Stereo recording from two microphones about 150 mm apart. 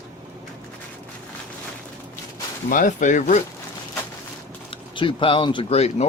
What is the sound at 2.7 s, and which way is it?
Speech, 55° left (ahead or behind).